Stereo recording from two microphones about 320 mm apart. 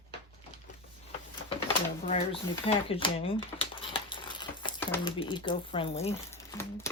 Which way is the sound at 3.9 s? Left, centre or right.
Centre.